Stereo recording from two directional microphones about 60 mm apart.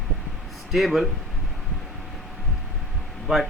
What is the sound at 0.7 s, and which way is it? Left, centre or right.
Speech, centre.